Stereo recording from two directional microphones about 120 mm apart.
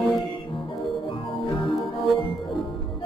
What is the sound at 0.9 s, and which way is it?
Music, 45° left (ahead or behind).